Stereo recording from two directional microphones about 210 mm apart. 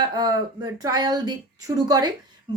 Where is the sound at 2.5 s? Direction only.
20° right (ahead or behind).